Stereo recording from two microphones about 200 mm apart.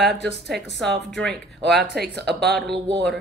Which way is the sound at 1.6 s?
55° right (ahead or behind).